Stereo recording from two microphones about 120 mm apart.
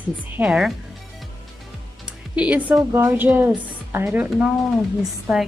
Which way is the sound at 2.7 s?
20° right (ahead or behind).